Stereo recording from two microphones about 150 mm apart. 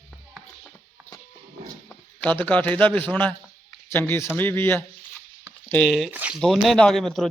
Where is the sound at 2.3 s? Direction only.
10° left (ahead or behind).